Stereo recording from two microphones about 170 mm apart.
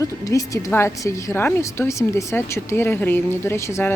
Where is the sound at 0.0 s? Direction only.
20° left (ahead or behind).